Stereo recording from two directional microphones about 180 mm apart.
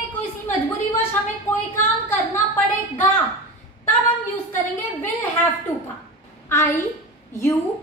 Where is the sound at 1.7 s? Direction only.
10° left (ahead or behind).